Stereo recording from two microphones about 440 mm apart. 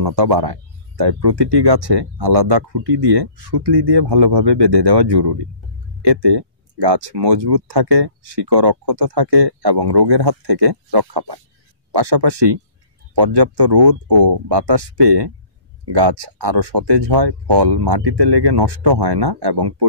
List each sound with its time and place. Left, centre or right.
0.0 s speech: right